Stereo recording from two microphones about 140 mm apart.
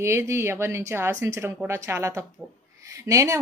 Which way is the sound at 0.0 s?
20° right (ahead or behind).